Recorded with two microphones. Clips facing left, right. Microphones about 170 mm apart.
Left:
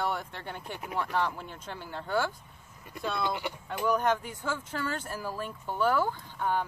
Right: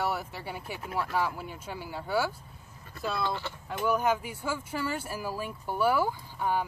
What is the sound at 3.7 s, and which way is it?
Speech, 5° right (ahead or behind).